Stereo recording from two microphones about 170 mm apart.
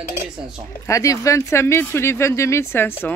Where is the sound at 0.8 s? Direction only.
20° left (ahead or behind).